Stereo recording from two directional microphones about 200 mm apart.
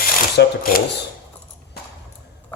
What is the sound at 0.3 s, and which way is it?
Speech, 45° left (ahead or behind).